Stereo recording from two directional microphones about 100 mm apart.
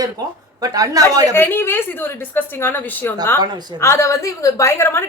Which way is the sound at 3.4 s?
45° right (ahead or behind).